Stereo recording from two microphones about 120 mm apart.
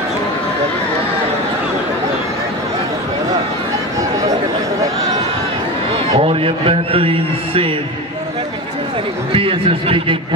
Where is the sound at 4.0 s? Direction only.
30° right (ahead or behind).